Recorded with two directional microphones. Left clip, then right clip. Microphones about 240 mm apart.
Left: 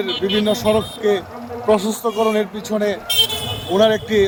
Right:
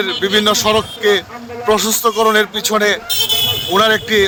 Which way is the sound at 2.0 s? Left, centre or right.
Right.